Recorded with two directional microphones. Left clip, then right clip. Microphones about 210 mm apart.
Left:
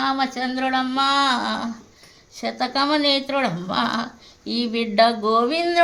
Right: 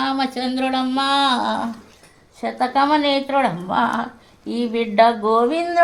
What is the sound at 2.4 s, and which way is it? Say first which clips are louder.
A woman's voice: right 4 dB; 40° left (ahead or behind).